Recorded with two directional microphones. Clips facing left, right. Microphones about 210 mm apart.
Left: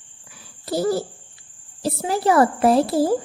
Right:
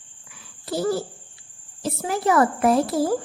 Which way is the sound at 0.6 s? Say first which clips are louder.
Left 2 dB; 40° left (ahead or behind).